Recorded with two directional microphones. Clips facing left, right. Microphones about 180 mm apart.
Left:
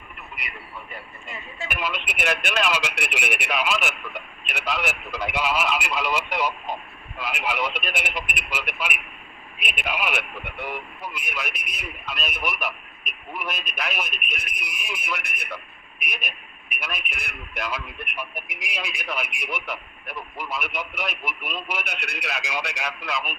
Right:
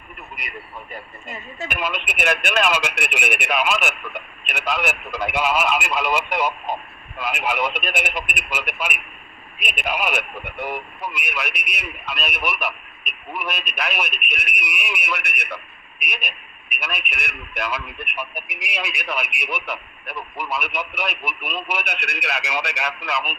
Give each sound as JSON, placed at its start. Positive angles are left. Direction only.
{"t": 1.7, "sound": "speech", "side_deg": -50}
{"t": 11.0, "sound": "a man's voice", "side_deg": -70}